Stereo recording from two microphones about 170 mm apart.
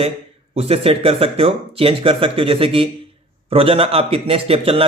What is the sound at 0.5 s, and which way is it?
A man's voice, 35° right (ahead or behind).